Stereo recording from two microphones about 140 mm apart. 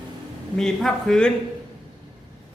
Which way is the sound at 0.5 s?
5° left (ahead or behind).